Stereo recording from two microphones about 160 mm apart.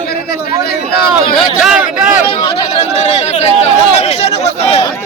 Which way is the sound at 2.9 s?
45° left (ahead or behind).